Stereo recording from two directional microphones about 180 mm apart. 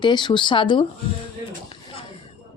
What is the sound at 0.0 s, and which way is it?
Speech, 25° left (ahead or behind).